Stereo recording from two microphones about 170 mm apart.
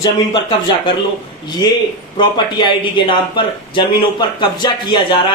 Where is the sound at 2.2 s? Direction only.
25° left (ahead or behind).